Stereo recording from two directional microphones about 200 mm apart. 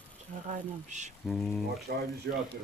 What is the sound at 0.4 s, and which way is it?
Speech, 35° right (ahead or behind).